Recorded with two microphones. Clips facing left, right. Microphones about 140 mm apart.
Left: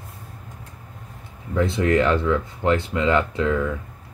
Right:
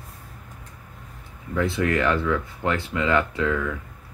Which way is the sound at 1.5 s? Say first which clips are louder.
Left 3 dB; 25° left (ahead or behind).